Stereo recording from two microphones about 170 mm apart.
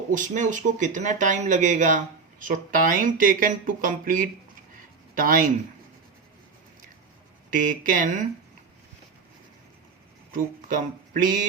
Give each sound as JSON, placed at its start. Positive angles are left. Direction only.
{"t": 0.1, "sound": "speech", "side_deg": -50}
{"t": 7.5, "sound": "speech", "side_deg": -55}
{"t": 10.3, "sound": "speech", "side_deg": -50}